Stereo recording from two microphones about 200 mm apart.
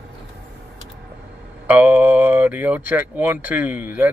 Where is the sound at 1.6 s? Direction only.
10° right (ahead or behind).